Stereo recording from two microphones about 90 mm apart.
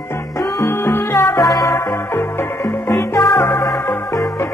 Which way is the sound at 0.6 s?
25° left (ahead or behind).